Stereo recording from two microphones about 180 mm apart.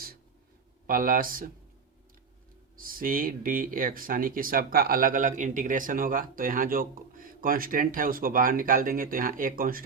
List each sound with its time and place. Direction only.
0.9 s speech: 50° right (ahead or behind)
2.7 s speech: 50° right (ahead or behind)